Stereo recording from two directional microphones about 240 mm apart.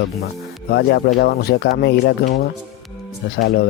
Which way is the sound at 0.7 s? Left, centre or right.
Left.